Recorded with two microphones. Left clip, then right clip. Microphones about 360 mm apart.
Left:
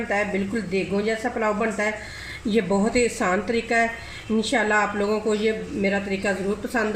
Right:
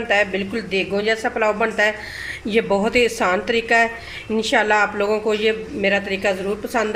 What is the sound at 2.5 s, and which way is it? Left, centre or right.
Speech, right.